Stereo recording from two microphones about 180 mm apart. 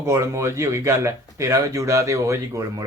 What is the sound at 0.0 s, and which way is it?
Speech, 15° right (ahead or behind).